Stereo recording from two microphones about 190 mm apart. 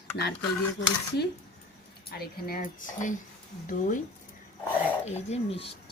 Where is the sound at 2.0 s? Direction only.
50° left (ahead or behind).